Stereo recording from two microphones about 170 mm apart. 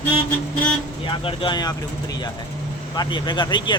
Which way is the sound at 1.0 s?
30° left (ahead or behind).